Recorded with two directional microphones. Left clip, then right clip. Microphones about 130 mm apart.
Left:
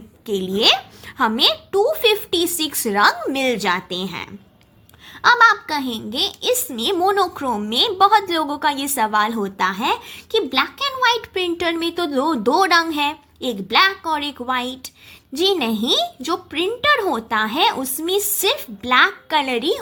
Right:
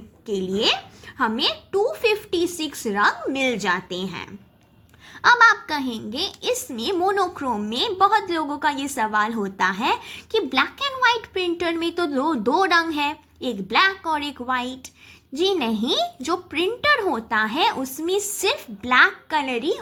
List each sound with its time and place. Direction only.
0.3 s a woman's voice: 25° left (ahead or behind)